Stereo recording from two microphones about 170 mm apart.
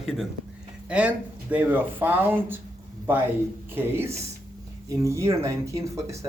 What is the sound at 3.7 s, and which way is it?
Speech, 15° right (ahead or behind).